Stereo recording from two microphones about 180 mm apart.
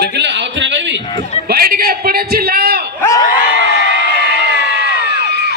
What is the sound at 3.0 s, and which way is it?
Crowd, 15° left (ahead or behind).